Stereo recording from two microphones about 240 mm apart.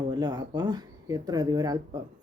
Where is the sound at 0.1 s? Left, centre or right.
Centre.